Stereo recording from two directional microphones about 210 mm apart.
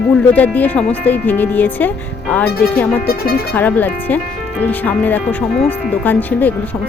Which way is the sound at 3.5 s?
10° left (ahead or behind).